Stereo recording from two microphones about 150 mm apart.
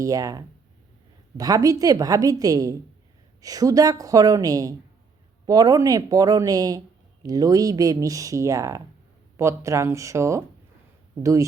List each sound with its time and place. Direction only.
0.0 s speech: 25° right (ahead or behind)